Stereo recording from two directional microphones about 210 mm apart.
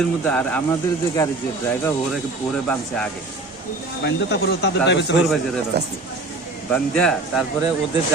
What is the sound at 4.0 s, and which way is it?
Speech, 55° left (ahead or behind).